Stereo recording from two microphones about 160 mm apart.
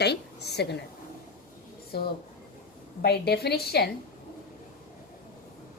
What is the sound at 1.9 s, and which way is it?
Speech, 80° left.